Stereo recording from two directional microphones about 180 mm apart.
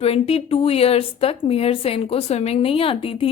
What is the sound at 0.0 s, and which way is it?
A woman's voice, 35° left (ahead or behind).